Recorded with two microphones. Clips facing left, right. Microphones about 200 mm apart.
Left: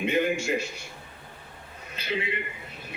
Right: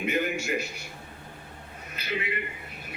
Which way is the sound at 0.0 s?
25° left (ahead or behind).